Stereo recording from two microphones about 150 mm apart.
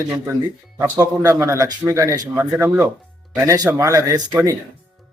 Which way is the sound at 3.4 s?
20° right (ahead or behind).